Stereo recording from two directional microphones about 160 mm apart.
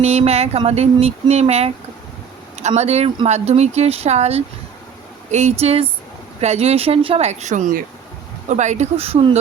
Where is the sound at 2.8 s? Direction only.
45° right (ahead or behind).